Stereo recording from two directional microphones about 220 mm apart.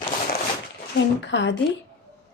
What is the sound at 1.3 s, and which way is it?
Speech, 55° left (ahead or behind).